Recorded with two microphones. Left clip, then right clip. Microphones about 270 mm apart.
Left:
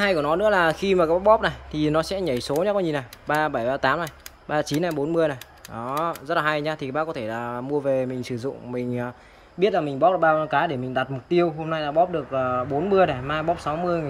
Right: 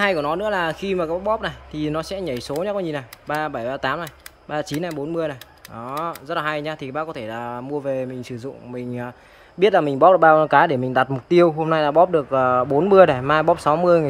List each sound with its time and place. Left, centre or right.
0.0 s speech: centre
9.6 s speech: centre